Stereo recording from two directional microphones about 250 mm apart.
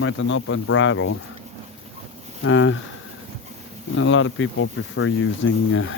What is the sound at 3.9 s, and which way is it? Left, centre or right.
Speech, left.